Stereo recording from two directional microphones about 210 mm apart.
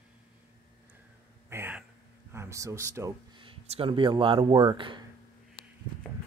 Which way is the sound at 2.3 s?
15° right (ahead or behind).